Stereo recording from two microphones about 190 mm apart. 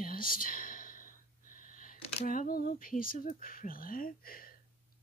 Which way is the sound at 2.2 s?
45° left (ahead or behind).